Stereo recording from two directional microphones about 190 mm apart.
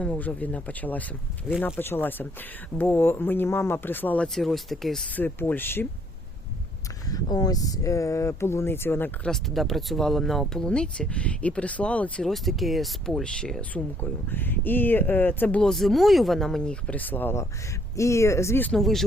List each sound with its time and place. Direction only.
0.0 s speech: 10° left (ahead or behind)
7.1 s speech: 20° left (ahead or behind); by 19.0 s centre (ahead or behind)